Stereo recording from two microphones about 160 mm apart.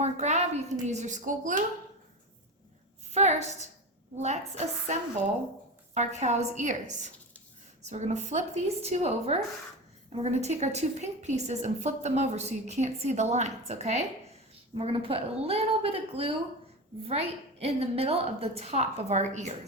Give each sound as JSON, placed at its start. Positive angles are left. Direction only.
{"t": 0.0, "sound": "a sound", "side_deg": -45}
{"t": 0.9, "sound": "a woman's voice", "side_deg": -45}
{"t": 3.1, "sound": "a woman's voice", "side_deg": -45}